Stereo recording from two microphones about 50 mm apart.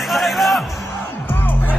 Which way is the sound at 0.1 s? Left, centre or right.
Centre.